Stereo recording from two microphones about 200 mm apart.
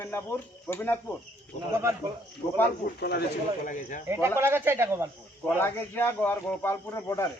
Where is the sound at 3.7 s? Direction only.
40° left (ahead or behind).